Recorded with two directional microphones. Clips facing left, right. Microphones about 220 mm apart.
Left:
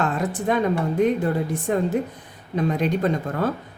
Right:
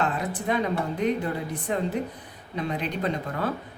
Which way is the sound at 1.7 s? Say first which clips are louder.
Left 4 dB; 45° left (ahead or behind).